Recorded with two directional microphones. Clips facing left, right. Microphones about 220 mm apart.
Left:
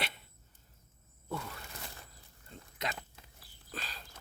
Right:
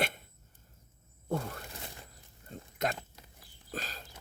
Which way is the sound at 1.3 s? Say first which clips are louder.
Right 6 dB; 45° right (ahead or behind).